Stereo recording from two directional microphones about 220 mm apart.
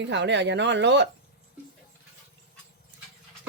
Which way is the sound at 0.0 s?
55° right (ahead or behind).